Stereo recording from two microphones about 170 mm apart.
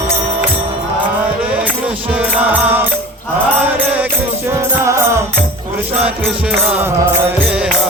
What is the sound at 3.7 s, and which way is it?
Mantra, 10° right (ahead or behind).